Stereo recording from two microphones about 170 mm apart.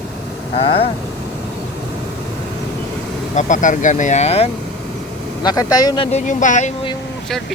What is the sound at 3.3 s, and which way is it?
Speech, 45° left (ahead or behind).